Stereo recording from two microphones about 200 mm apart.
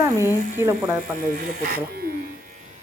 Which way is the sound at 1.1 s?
45° right (ahead or behind).